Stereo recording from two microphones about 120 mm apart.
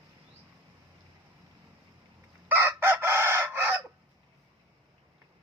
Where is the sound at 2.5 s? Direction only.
20° right (ahead or behind).